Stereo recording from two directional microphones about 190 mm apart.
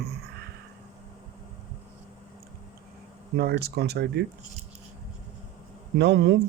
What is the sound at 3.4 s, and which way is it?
Speech, 60° right (ahead or behind).